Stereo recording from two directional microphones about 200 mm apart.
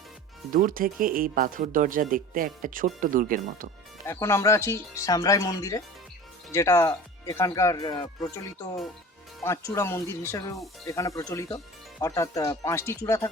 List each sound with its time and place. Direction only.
0.5 s speech: 45° right (ahead or behind)
4.0 s speech: 15° left (ahead or behind)
9.4 s speech: 15° left (ahead or behind)